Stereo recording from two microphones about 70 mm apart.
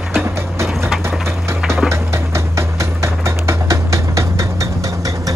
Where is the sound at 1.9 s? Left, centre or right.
Right.